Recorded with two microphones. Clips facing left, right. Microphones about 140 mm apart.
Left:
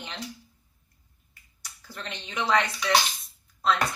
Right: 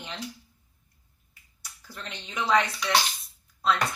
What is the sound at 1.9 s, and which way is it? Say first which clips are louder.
Speech: left 1 dB; 5° right (ahead or behind).